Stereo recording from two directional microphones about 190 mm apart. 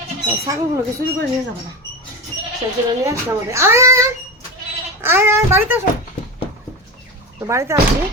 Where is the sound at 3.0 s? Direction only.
15° right (ahead or behind).